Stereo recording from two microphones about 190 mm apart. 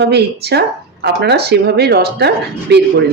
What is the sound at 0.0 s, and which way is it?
Speech, 60° right (ahead or behind).